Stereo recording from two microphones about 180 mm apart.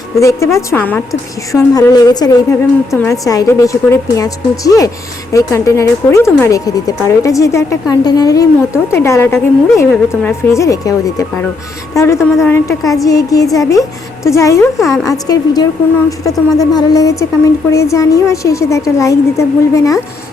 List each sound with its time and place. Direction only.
0.2 s speech: 15° left (ahead or behind)
1.5 s a woman's voice: 20° left (ahead or behind)